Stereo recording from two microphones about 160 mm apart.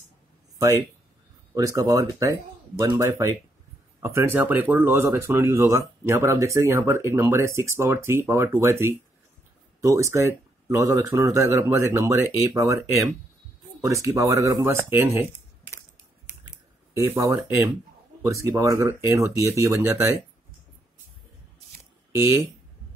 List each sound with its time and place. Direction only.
1.5 s speech: 20° right (ahead or behind)
16.9 s speech: 20° right (ahead or behind)
22.2 s speech: 20° right (ahead or behind)